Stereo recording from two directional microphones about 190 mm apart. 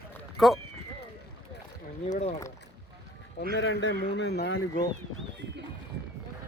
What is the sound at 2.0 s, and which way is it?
Speech, 40° left (ahead or behind).